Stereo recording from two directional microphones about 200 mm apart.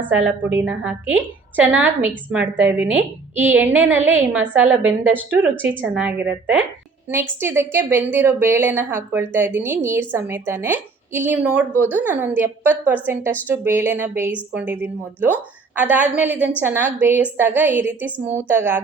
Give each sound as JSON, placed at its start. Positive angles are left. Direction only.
{"t": 0.3, "sound": "a woman's voice", "side_deg": -10}